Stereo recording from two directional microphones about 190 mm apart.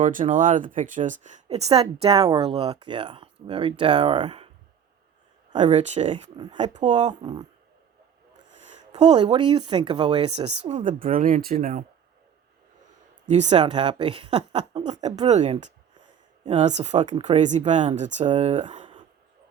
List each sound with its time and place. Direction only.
0.0 s speech: 45° right (ahead or behind); by 4.4 s 30° right (ahead or behind)
5.5 s speech: 25° right (ahead or behind)
7.2 s speech: 20° right (ahead or behind)
8.5 s speech: 35° right (ahead or behind)
13.2 s speech: 35° right (ahead or behind)
13.6 s speech: 25° right (ahead or behind)
14.9 s speech: 35° right (ahead or behind)